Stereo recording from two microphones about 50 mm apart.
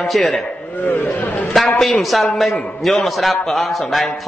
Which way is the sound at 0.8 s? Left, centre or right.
Left.